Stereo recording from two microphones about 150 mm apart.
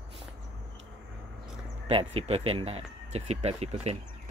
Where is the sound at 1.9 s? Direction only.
40° right (ahead or behind).